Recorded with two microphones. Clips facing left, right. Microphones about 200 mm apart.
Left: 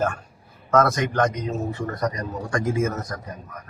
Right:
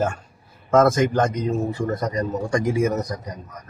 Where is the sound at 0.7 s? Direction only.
25° right (ahead or behind).